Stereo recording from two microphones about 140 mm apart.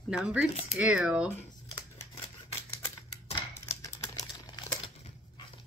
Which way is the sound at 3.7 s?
25° left (ahead or behind).